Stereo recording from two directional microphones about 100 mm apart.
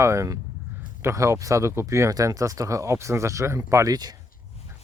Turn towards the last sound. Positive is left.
turn(degrees=-40)  # may be behind; listen again after turning